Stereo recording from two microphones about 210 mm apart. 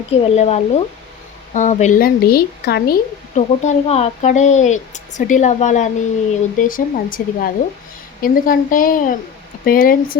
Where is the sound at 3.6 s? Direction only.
30° left (ahead or behind).